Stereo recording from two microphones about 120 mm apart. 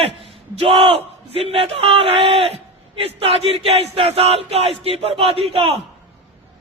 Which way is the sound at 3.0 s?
55° right (ahead or behind).